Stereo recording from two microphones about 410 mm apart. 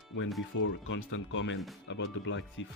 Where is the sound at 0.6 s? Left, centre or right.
Left.